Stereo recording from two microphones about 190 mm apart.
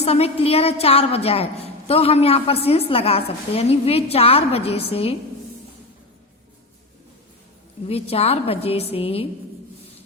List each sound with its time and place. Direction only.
0.0 s a woman's voice: 30° left (ahead or behind)
7.9 s a woman's voice: 30° left (ahead or behind)